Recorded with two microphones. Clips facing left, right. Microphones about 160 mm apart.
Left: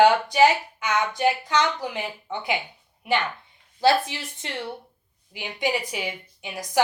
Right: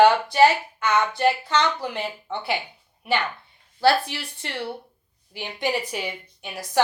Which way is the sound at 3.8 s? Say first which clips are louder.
Even; 20° left (ahead or behind).